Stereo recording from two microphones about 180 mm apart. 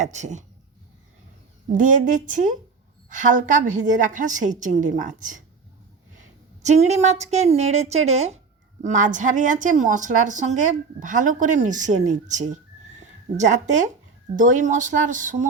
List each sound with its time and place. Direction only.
0.0 s a woman's voice: 40° right (ahead or behind)
1.7 s a woman's voice: 45° right (ahead or behind)
6.6 s a woman's voice: 40° right (ahead or behind)